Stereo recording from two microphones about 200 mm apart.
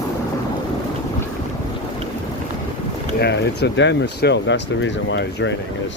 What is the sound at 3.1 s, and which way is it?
Speech, 55° left (ahead or behind).